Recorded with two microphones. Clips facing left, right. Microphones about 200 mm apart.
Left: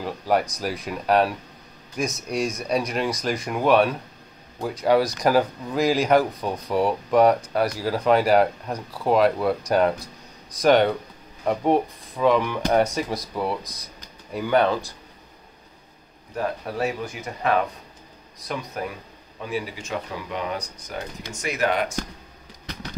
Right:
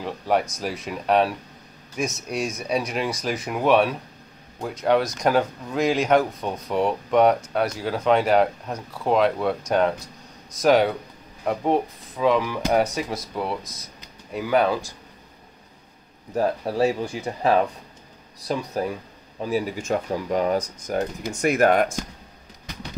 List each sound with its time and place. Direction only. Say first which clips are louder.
0.0 s speech: even; centre (ahead or behind)
16.3 s speech: right 5 dB; 30° right (ahead or behind)
18.8 s speech: right 5 dB; 30° right (ahead or behind)
19.4 s speech: right 5 dB; 40° right (ahead or behind)